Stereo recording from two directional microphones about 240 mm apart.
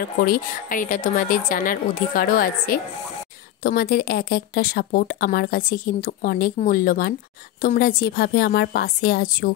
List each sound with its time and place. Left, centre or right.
0.2 s speech: left